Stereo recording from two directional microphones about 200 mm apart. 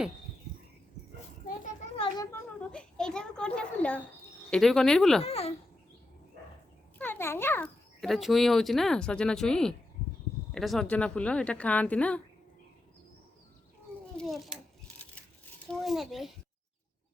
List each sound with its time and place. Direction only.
2.3 s a child's voice: 5° left (ahead or behind)
5.2 s speech: 30° left (ahead or behind)
7.0 s a child's voice: 10° left (ahead or behind)
14.2 s a sound: centre (ahead or behind)
15.7 s a child's voice: centre (ahead or behind)